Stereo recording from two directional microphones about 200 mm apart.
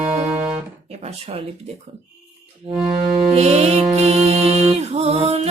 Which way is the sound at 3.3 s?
35° right (ahead or behind).